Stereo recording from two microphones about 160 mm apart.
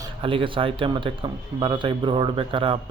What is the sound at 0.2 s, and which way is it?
Speech, 35° right (ahead or behind).